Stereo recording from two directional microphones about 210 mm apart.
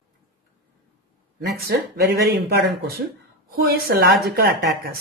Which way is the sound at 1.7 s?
55° right (ahead or behind).